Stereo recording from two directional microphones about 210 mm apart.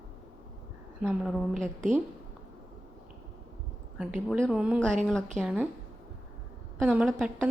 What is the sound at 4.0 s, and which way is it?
Speech, centre (ahead or behind).